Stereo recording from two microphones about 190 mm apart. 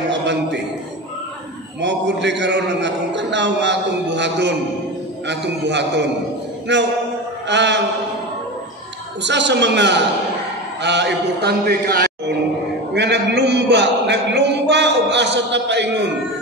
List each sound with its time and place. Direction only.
0.1 s a sound: 65° right (ahead or behind)
1.8 s a man's voice: 65° right (ahead or behind)
9.2 s a man's voice: 65° right (ahead or behind)